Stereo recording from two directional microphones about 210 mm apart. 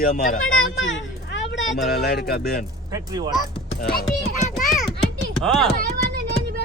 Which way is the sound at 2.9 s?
15° right (ahead or behind).